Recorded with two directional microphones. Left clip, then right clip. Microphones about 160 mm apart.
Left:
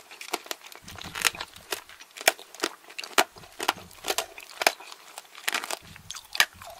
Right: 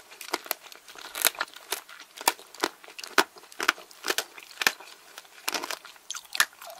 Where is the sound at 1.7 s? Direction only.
5° right (ahead or behind).